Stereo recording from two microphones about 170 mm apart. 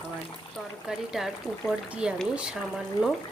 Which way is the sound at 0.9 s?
Centre (ahead or behind).